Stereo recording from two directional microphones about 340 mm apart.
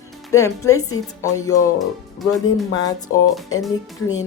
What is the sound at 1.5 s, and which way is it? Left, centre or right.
Speech, centre.